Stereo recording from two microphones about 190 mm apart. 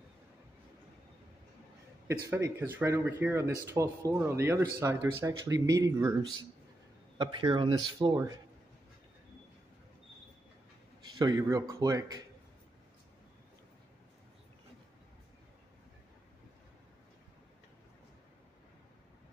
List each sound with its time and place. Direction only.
2.2 s speech: 15° right (ahead or behind)
7.2 s speech: 25° right (ahead or behind)
11.1 s a man's voice: 20° right (ahead or behind)